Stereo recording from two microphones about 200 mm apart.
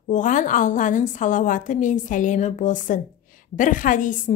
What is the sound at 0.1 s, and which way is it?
A woman's voice, 40° left (ahead or behind).